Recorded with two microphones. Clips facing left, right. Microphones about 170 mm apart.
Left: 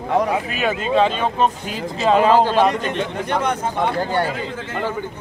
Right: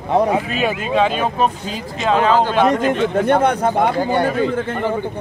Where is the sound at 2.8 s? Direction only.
45° right (ahead or behind).